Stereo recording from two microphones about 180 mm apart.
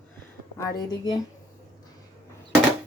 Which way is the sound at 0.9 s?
20° left (ahead or behind).